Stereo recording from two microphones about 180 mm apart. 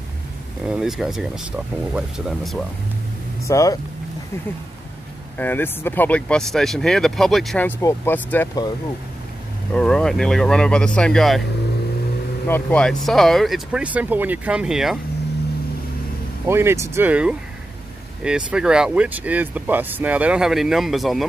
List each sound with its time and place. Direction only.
0.7 s speech: 5° right (ahead or behind)
3.4 s speech: 15° left (ahead or behind)
5.4 s speech: 10° left (ahead or behind)
9.8 s speech: 5° left (ahead or behind)
12.4 s speech: 10° left (ahead or behind)
16.4 s speech: 15° right (ahead or behind)